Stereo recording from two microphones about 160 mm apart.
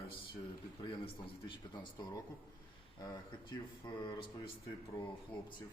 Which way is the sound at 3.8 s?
30° left (ahead or behind).